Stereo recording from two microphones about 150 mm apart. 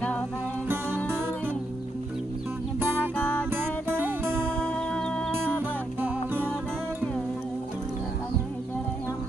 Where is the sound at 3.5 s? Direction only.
15° right (ahead or behind).